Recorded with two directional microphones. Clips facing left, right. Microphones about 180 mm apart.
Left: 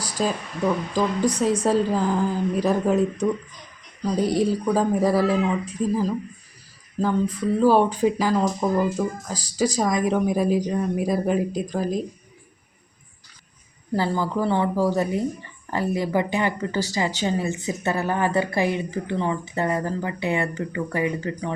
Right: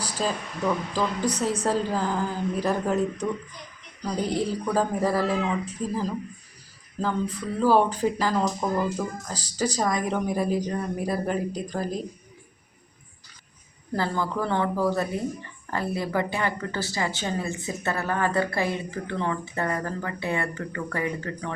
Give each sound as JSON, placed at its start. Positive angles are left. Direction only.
{"t": 0.9, "sound": "speech", "side_deg": 15}
{"t": 13.9, "sound": "speech", "side_deg": 10}